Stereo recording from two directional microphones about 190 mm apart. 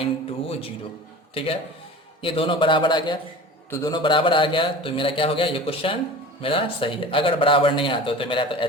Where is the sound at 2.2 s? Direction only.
30° left (ahead or behind).